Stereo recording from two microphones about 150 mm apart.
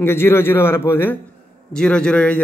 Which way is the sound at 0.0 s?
15° left (ahead or behind).